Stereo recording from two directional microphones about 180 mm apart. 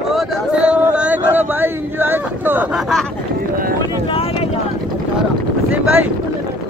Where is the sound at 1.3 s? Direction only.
10° right (ahead or behind).